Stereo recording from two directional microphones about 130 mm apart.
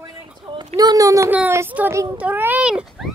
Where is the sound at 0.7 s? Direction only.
30° right (ahead or behind); by 3.1 s 5° right (ahead or behind).